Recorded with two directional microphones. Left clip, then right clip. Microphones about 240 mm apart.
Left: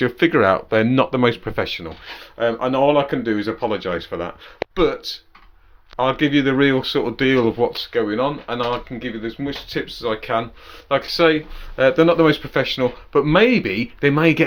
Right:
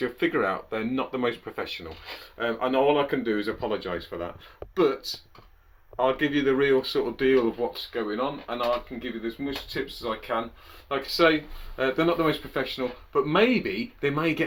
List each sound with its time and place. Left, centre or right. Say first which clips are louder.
0.0 s speech: left 9 dB; left